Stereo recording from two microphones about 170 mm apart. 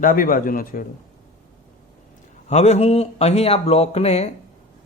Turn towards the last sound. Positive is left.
turn(degrees=35)  # may be behind; listen again after turning